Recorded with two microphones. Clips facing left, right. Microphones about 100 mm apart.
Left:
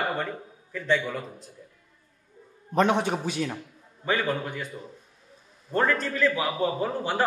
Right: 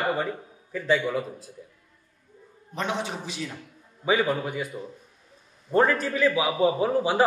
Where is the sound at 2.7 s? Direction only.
50° left (ahead or behind).